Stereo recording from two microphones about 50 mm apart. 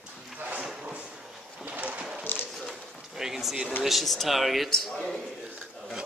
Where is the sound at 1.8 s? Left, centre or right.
Right.